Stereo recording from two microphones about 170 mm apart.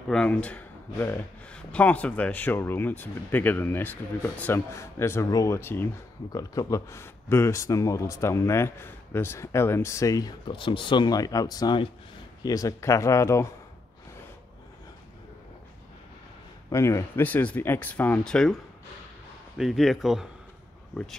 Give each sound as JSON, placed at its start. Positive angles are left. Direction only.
{"t": 0.1, "sound": "speech", "side_deg": 5}
{"t": 16.7, "sound": "a man's voice", "side_deg": 15}